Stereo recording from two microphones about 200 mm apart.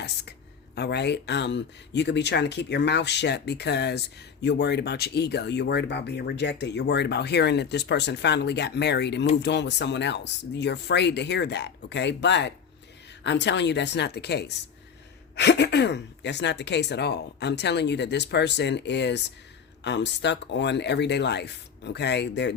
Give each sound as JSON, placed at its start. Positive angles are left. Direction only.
{"t": 0.8, "sound": "speech", "side_deg": 55}